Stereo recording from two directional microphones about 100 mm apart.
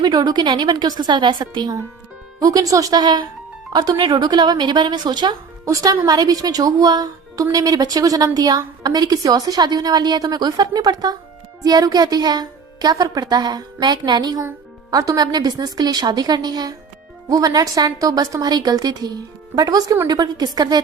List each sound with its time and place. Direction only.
0.0 s a woman's voice: 45° right (ahead or behind)
2.4 s a woman's voice: 35° right (ahead or behind)